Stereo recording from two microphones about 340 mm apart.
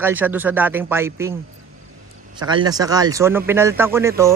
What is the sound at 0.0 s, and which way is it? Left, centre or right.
Speech, centre.